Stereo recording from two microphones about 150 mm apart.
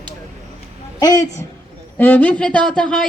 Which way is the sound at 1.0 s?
25° left (ahead or behind).